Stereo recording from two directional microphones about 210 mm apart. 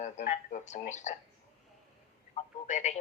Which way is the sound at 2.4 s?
30° left (ahead or behind).